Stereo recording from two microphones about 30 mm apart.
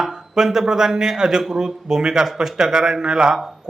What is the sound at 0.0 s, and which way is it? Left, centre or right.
A man's voice, centre.